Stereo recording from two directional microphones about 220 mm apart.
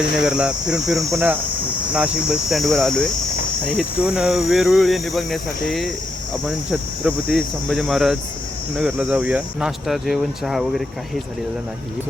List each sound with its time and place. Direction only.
0.2 s speech: 5° right (ahead or behind)
1.1 s hum: 10° right (ahead or behind)
2.5 s speech: centre (ahead or behind)